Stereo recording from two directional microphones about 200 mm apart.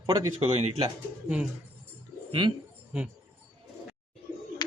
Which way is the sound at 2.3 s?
25° right (ahead or behind).